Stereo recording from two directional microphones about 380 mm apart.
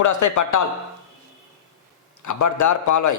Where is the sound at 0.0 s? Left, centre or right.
Left.